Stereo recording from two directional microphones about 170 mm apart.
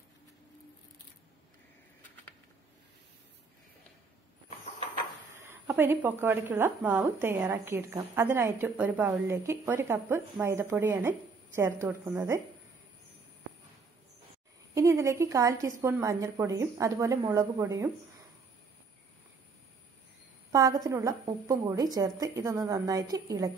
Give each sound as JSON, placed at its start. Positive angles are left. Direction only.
{"t": 5.4, "sound": "a woman's voice", "side_deg": -15}
{"t": 14.7, "sound": "a woman's voice", "side_deg": -20}
{"t": 20.5, "sound": "a woman's voice", "side_deg": -20}